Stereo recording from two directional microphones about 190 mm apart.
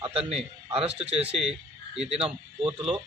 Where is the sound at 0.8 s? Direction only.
30° right (ahead or behind).